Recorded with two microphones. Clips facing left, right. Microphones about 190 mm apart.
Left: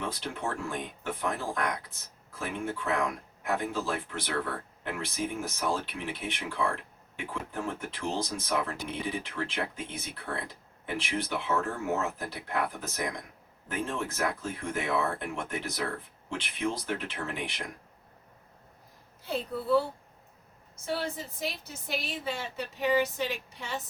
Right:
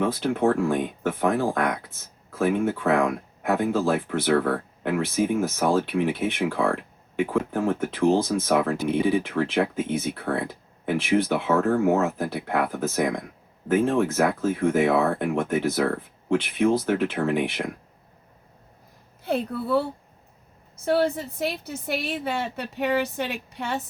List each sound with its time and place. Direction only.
0.0 s speech: 55° right (ahead or behind)
19.2 s speech: 60° right (ahead or behind)
20.8 s speech: 60° right (ahead or behind)